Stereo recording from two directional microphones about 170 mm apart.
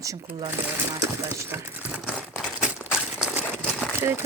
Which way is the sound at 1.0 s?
15° right (ahead or behind).